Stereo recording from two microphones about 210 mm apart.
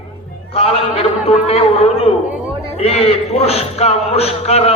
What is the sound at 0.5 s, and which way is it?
A man's voice, 30° left (ahead or behind).